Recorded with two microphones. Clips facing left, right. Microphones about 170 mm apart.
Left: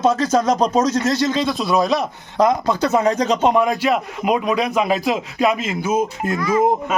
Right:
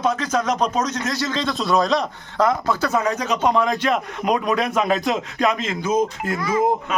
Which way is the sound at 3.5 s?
15° left (ahead or behind).